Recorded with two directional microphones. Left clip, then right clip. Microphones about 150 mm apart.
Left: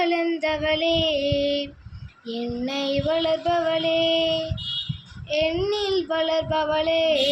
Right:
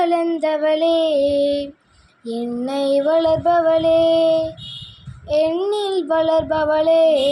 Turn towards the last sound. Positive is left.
turn(degrees=-45)  # may be behind; listen again after turning